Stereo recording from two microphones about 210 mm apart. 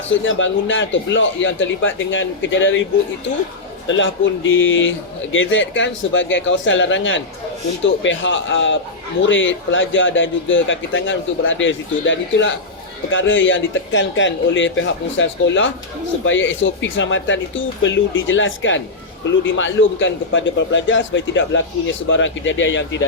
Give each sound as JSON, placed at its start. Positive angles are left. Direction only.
{"t": 0.1, "sound": "a man's voice", "side_deg": 65}
{"t": 3.8, "sound": "a man's voice", "side_deg": 60}